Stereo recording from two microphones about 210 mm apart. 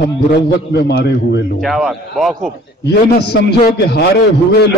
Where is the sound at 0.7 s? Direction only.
50° left (ahead or behind).